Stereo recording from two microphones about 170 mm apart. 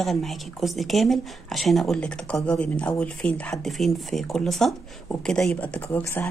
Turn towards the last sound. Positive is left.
turn(degrees=15)  # may be behind; listen again after turning